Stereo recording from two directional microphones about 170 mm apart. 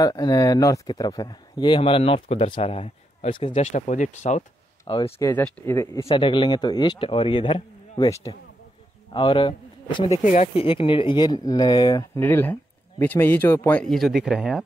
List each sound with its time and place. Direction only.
0.0 s speech: 20° left (ahead or behind); by 4.5 s 45° left (ahead or behind)
4.8 s speech: 30° left (ahead or behind)
5.2 s speech: 10° left (ahead or behind)
6.0 s speech: 30° left (ahead or behind)
9.1 s a man's voice: 30° left (ahead or behind)
10.2 s speech: 45° left (ahead or behind); by 14.6 s centre (ahead or behind)